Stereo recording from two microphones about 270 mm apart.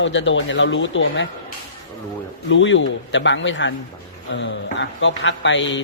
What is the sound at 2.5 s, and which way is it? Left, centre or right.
Speech, left.